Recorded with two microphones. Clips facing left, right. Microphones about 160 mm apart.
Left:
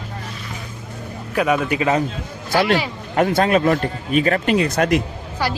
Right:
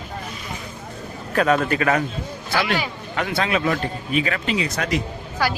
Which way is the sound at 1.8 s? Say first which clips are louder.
Left 2 dB; 20° left (ahead or behind).